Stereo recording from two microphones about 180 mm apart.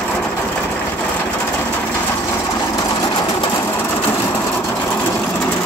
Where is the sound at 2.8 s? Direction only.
20° left (ahead or behind).